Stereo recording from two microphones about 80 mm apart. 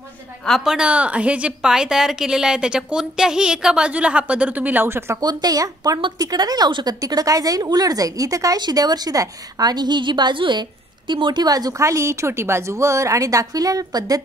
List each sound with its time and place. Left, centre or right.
0.7 s a woman's voice: centre; by 5.2 s right
5.2 s a woman's voice: right
8.5 s a woman's voice: right
11.4 s a woman's voice: right
11.8 s a woman's voice: right